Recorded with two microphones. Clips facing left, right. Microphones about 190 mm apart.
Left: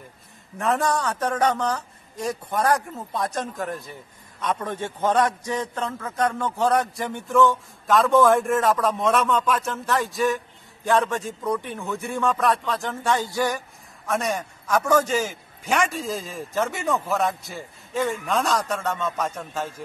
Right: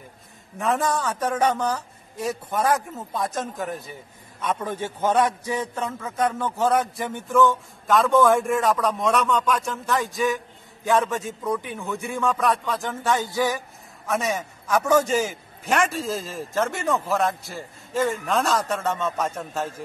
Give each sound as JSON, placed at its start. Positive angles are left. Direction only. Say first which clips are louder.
{"t": 0.6, "sound": "a man's voice", "louder": "left 1 dB", "side_deg": 0}